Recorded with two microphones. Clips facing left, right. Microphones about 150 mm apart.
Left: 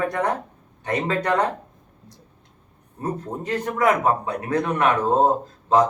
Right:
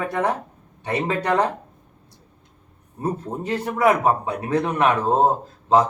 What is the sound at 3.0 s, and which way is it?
Speech, 10° right (ahead or behind).